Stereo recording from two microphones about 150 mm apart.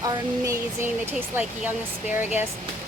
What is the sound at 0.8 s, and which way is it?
A woman's voice, 10° right (ahead or behind).